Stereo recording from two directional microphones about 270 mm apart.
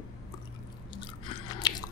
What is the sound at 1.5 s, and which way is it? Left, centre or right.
Biting, centre.